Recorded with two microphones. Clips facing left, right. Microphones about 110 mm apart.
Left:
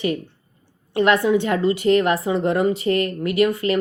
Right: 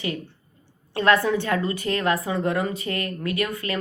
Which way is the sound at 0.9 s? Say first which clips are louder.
Left 3 dB; 20° left (ahead or behind).